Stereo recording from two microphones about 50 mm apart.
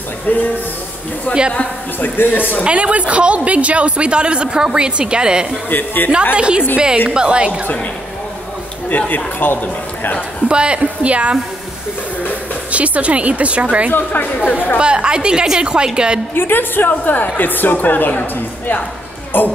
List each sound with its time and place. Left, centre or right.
0.3 s a woman's voice: left
1.5 s a woman's voice: left
2.6 s speech: right
5.7 s a woman's voice: left
6.3 s a woman's voice: right
8.8 s a woman's voice: left
10.5 s speech: right
12.7 s speech: right
13.9 s a woman's voice: left
14.8 s a woman's voice: centre
16.3 s a woman's voice: left
19.3 s a sound: left